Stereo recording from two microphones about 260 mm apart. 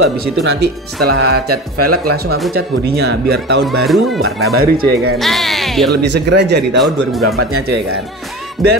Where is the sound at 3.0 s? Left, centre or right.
Right.